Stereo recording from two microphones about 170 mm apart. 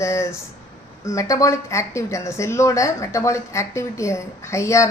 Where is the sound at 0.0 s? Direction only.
15° left (ahead or behind).